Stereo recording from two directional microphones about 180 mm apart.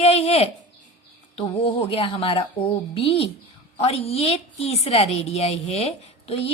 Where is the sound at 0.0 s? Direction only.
35° left (ahead or behind).